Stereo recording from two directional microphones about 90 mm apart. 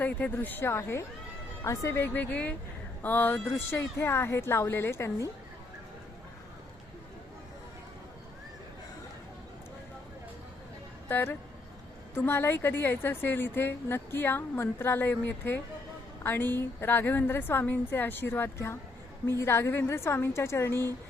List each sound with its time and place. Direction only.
0.0 s a woman's voice: 20° left (ahead or behind)
11.1 s a woman's voice: 25° left (ahead or behind)